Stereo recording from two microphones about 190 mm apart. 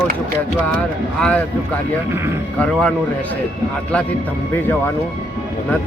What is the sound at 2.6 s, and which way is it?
Speech, 5° left (ahead or behind).